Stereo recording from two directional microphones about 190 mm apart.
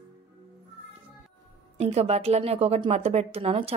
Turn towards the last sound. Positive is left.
turn(degrees=-30)  # may be behind; listen again after turning